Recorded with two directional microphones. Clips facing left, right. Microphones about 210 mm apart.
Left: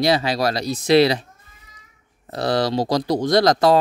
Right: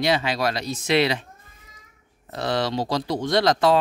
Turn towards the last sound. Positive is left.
turn(degrees=40)  # may be behind; listen again after turning